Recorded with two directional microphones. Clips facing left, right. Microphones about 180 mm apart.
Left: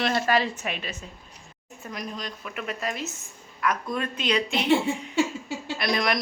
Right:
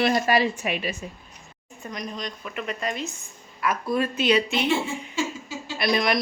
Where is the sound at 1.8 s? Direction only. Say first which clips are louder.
Right 2 dB; 5° left (ahead or behind).